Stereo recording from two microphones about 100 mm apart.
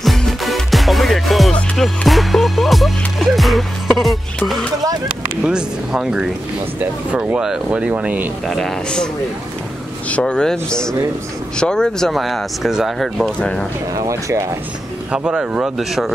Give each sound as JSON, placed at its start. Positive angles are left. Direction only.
{"t": 0.0, "sound": "music", "side_deg": 0}
{"t": 5.4, "sound": "speech", "side_deg": -10}
{"t": 8.5, "sound": "speech", "side_deg": 5}
{"t": 13.4, "sound": "speech", "side_deg": 10}
{"t": 13.9, "sound": "speech", "side_deg": -30}
{"t": 15.0, "sound": "speech", "side_deg": -10}